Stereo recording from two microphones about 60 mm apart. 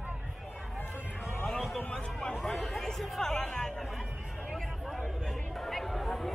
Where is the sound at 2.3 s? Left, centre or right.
Centre.